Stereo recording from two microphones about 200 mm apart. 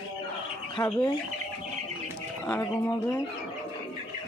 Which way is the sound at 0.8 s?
20° left (ahead or behind).